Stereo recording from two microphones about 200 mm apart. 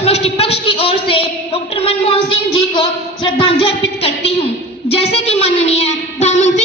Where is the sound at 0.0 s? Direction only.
30° left (ahead or behind).